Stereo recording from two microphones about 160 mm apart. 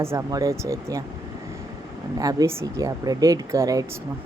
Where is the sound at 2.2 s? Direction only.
25° right (ahead or behind).